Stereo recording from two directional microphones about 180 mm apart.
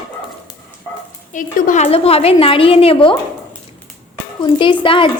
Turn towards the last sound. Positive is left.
turn(degrees=30)  # may be behind; listen again after turning